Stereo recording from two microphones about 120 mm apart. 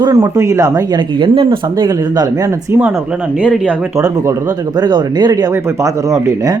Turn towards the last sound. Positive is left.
turn(degrees=-30)  # may be behind; listen again after turning